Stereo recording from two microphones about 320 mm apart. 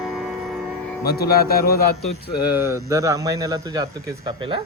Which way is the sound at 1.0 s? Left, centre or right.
Left.